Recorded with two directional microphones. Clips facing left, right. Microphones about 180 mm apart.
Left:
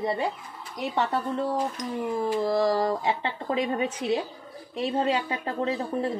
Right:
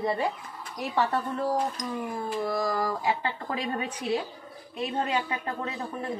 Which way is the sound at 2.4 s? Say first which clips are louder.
Left 4 dB; 25° left (ahead or behind).